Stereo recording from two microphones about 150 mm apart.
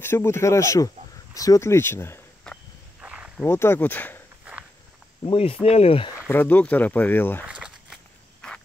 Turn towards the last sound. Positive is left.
turn(degrees=-5)  # may be behind; listen again after turning